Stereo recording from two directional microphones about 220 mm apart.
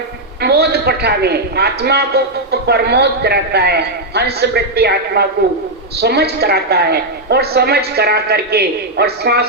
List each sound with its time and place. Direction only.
0.4 s a man's voice: 45° right (ahead or behind)